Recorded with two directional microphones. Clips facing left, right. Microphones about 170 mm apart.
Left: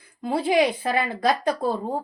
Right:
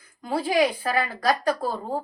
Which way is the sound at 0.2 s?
20° left (ahead or behind).